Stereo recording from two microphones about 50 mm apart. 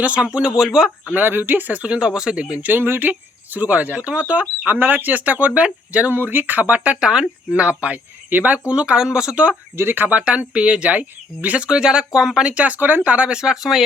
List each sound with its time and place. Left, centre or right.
0.0 s speech: right
1.1 s speech: right
2.8 s speech: right
6.1 s speech: right
7.0 s speech: centre
8.6 s speech: right
9.3 s speech: right
11.6 s speech: centre